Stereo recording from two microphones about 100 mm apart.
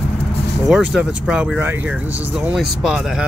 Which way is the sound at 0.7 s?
5° right (ahead or behind).